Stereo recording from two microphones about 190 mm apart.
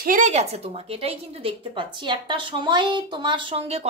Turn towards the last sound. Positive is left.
turn(degrees=-30)  # may be behind; listen again after turning